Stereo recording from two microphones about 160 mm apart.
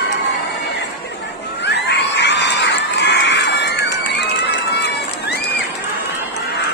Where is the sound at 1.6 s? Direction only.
90° left.